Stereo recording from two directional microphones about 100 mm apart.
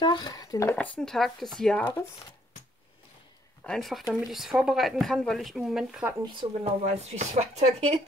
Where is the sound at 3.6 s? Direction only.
5° left (ahead or behind).